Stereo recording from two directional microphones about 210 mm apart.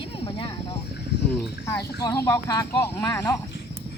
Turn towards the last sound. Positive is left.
turn(degrees=15)  # may be behind; listen again after turning